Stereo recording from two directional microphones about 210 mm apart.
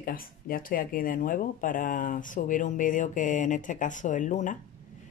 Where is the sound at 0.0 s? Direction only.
40° left (ahead or behind).